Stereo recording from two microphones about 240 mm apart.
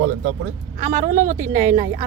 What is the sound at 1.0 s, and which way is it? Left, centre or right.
Speech, right.